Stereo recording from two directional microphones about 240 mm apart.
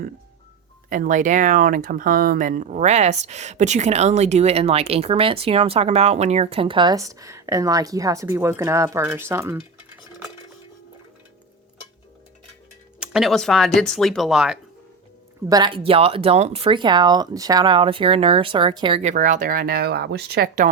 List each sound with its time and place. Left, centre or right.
0.9 s speech: right; by 10.3 s centre
13.0 s speech: centre
15.4 s speech: centre; by 20.7 s right